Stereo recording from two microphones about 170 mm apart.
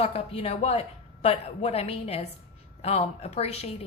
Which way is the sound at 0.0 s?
35° left (ahead or behind).